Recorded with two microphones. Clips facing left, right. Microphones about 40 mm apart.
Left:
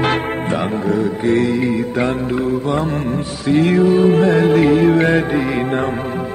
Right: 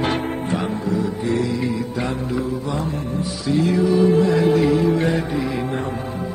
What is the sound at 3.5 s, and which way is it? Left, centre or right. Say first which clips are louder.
Music: left 5 dB; left.